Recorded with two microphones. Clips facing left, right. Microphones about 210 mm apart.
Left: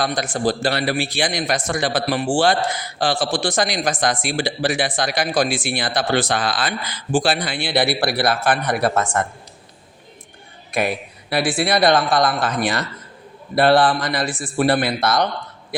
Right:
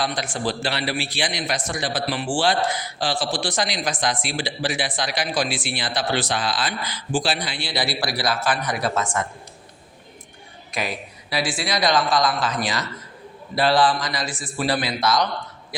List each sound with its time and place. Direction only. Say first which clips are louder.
0.0 s speech: left 5 dB; 45° left (ahead or behind)
10.7 s speech: left 6 dB; 60° left (ahead or behind)